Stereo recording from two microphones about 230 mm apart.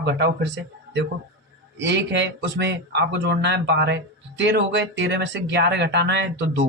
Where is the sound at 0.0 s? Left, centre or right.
Right.